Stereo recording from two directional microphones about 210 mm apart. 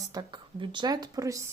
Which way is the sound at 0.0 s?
20° right (ahead or behind).